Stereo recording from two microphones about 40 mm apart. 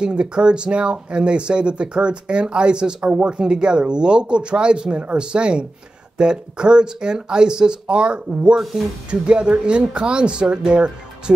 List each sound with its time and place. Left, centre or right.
0.0 s speech: right